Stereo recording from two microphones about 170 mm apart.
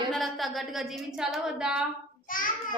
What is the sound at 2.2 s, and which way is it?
Child singing, 55° left (ahead or behind).